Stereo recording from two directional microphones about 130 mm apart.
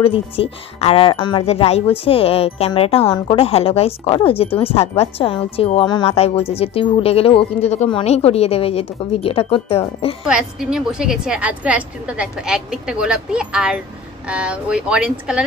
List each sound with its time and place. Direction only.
0.0 s a woman's voice: 45° left (ahead or behind)
1.4 s a woman's voice: 55° left (ahead or behind)
5.8 s speech: 35° left (ahead or behind)
6.0 s a woman's voice: 50° left (ahead or behind)
10.2 s a woman's voice: 5° right (ahead or behind)